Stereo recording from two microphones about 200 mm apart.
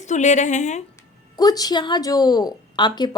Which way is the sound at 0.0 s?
35° left (ahead or behind).